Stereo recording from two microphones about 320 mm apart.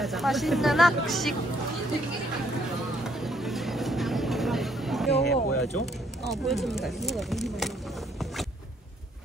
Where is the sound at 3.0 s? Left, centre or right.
Centre.